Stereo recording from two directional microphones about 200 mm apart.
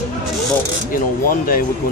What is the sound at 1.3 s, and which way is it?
Speech, 45° left (ahead or behind).